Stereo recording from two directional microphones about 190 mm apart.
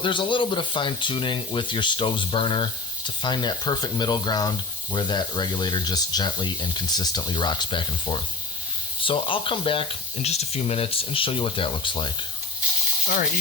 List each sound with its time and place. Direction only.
0.0 s speech: 25° left (ahead or behind)